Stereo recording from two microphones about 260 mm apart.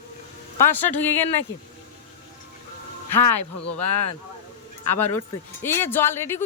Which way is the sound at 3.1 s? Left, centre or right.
Left.